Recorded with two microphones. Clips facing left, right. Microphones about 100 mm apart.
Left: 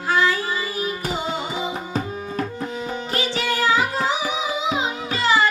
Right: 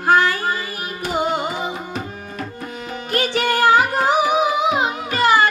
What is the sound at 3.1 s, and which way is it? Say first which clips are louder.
Music: right 6 dB; 55° right (ahead or behind).